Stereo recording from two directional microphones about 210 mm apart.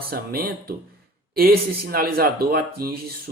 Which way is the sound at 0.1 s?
45° right (ahead or behind).